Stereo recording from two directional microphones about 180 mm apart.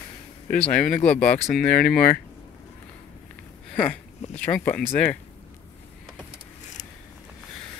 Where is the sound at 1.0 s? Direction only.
10° left (ahead or behind).